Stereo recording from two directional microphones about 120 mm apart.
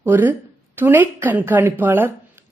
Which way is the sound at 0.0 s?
15° right (ahead or behind).